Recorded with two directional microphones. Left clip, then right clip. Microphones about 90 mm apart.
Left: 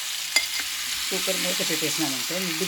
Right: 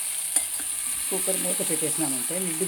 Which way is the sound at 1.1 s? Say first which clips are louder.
Left 3 dB; centre (ahead or behind).